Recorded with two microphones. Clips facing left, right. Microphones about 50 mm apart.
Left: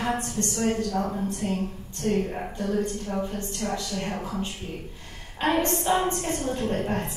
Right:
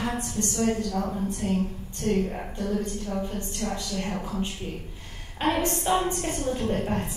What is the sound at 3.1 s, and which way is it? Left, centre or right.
A woman's voice, left.